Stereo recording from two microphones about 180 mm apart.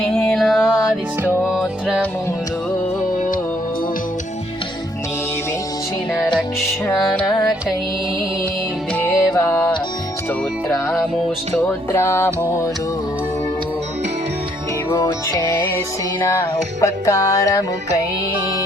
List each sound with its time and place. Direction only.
0.0 s music: 5° left (ahead or behind)
3.2 s music: 50° left (ahead or behind)
6.9 s music: centre (ahead or behind)
9.0 s music: 10° left (ahead or behind)
11.5 s music: 10° left (ahead or behind)
14.9 s music: 15° left (ahead or behind)
16.8 s music: 15° left (ahead or behind)